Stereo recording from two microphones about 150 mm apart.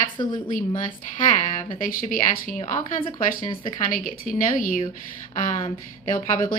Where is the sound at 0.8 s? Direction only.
60° left (ahead or behind).